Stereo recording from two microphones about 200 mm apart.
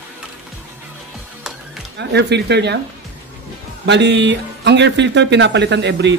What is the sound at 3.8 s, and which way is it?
Speech, 60° right (ahead or behind).